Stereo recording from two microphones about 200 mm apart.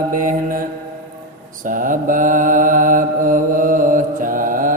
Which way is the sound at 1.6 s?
40° right (ahead or behind).